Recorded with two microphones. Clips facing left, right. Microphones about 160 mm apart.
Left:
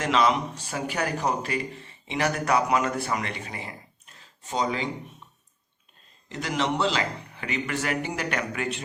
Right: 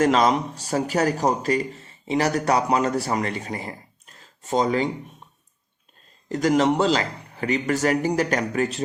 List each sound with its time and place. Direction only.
0.0 s speech: 40° right (ahead or behind)
6.2 s speech: 45° right (ahead or behind)